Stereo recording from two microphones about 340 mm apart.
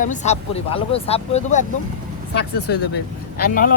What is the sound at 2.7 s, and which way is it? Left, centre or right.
Speech, left.